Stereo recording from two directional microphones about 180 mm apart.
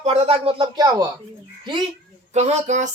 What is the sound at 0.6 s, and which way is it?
Speech, 20° right (ahead or behind).